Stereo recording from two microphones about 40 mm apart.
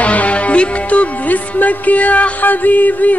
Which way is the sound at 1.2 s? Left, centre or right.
Left.